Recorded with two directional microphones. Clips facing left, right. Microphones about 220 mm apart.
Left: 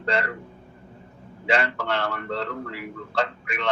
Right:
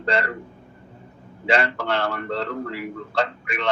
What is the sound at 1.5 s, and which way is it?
A man's voice, 35° right (ahead or behind).